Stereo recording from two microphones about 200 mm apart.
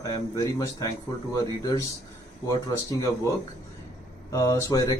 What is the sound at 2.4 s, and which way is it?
Speech, 20° left (ahead or behind).